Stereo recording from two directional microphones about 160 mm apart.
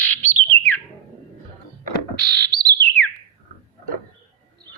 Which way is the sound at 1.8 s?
90° right.